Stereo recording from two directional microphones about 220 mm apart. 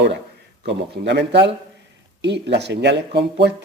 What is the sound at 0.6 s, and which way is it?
Speech, 50° right (ahead or behind).